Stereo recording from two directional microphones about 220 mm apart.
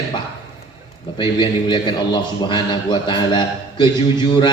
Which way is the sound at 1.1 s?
20° left (ahead or behind).